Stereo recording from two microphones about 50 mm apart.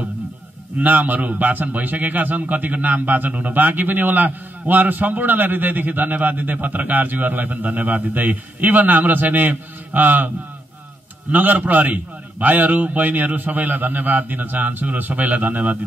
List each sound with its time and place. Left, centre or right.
0.7 s a man's voice: right
11.3 s a man's voice: right